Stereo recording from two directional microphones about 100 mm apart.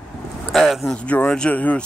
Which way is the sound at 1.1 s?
10° left (ahead or behind).